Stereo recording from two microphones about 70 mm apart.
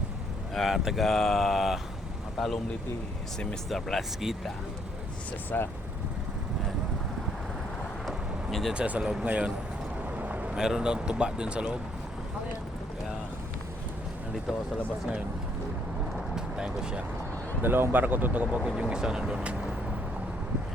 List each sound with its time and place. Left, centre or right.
0.5 s speech: centre
3.7 s speech: centre
5.5 s speech: left
8.0 s vehicle: centre
8.7 s speech: centre
10.2 s vehicle: right
10.6 s speech: centre
16.3 s vehicle: centre
17.6 s speech: right
18.8 s speech: centre